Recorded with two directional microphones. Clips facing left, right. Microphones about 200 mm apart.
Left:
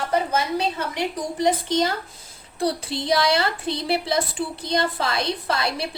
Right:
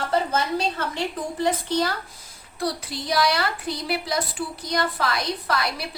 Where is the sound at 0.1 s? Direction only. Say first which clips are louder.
Left 1 dB; 15° left (ahead or behind).